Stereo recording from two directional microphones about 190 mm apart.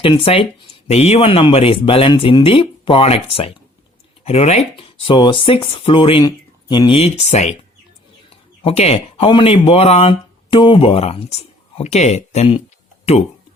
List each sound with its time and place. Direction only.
0.0 s speech: 30° left (ahead or behind)
8.6 s speech: 30° left (ahead or behind)